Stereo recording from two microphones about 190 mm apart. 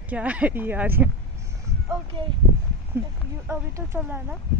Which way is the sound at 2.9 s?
10° right (ahead or behind).